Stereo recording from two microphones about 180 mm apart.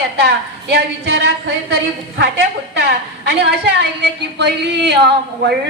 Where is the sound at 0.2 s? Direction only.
70° right (ahead or behind).